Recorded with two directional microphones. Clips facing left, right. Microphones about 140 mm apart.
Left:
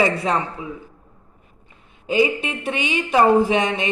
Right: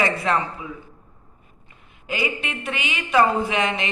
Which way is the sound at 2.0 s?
25° left (ahead or behind).